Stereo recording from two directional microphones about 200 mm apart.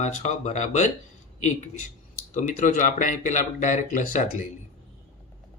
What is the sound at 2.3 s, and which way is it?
Speech, 40° left (ahead or behind).